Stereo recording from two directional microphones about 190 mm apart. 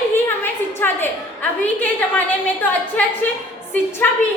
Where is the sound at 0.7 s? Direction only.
10° left (ahead or behind).